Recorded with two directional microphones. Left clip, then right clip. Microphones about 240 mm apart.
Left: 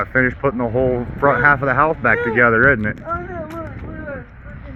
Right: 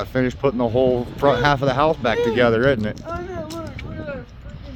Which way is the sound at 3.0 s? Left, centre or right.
Centre.